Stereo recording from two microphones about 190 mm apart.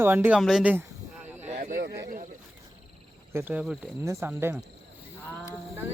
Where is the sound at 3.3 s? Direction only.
10° right (ahead or behind).